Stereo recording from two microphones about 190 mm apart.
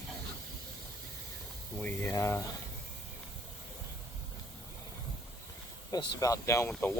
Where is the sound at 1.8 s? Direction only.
15° left (ahead or behind).